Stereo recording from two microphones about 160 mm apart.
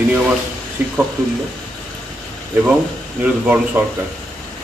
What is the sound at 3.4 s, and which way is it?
Speech, 10° right (ahead or behind).